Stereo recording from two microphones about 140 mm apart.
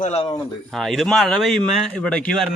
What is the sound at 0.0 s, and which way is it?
Speech, 50° left (ahead or behind).